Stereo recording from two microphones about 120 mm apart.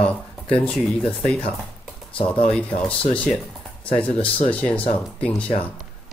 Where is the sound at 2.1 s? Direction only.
45° left (ahead or behind).